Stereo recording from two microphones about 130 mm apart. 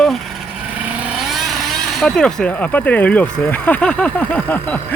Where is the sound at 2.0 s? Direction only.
5° left (ahead or behind).